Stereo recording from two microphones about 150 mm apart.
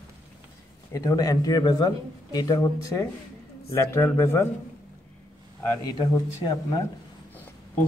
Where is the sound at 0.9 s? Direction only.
25° left (ahead or behind).